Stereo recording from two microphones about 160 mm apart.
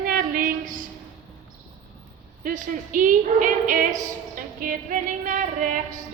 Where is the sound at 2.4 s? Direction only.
55° right (ahead or behind).